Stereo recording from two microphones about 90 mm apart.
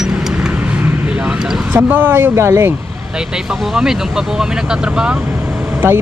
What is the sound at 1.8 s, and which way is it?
Speech, 15° right (ahead or behind).